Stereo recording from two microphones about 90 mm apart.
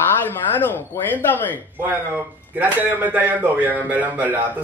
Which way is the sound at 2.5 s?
20° right (ahead or behind).